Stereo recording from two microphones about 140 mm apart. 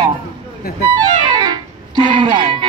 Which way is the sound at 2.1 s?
35° right (ahead or behind).